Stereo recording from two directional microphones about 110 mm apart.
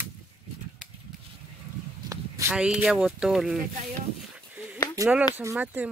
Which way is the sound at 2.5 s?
5° right (ahead or behind).